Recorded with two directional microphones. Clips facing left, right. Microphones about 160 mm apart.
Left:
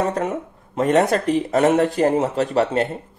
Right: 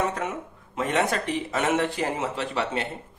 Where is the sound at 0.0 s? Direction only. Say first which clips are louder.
Left 5 dB; 35° left (ahead or behind).